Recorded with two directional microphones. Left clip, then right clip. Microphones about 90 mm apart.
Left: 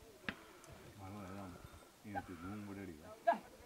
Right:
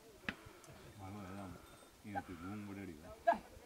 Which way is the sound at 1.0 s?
15° right (ahead or behind).